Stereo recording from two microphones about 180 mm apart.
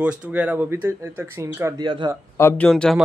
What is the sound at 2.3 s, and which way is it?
Speech, 10° left (ahead or behind).